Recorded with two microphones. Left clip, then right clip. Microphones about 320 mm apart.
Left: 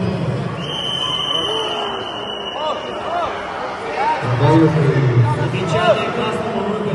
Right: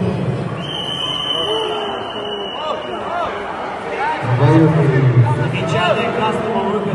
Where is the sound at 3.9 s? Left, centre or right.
Centre.